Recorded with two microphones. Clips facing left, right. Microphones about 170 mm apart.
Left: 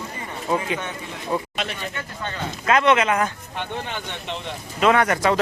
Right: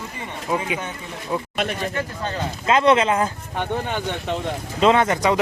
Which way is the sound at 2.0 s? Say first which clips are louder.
Right 4 dB; 30° right (ahead or behind).